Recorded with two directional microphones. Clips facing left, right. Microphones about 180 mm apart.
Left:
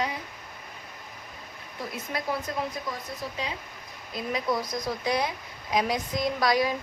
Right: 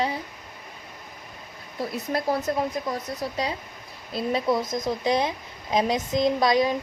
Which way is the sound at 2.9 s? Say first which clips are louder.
Right 6 dB; 40° right (ahead or behind).